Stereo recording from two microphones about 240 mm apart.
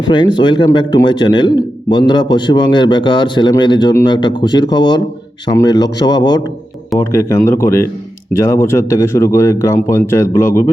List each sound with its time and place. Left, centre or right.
0.0 s a man's voice: centre